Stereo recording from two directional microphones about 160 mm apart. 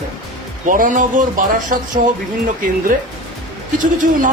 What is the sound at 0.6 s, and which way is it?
A man's voice, 55° right (ahead or behind).